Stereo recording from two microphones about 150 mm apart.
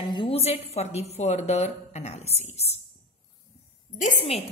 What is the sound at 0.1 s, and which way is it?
A woman's voice, 35° left (ahead or behind).